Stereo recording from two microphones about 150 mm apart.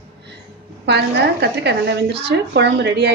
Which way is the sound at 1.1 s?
90° right.